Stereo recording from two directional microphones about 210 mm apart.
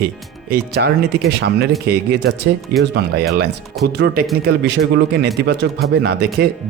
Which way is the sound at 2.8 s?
50° right (ahead or behind).